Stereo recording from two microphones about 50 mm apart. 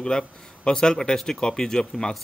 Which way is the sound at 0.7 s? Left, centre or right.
Centre.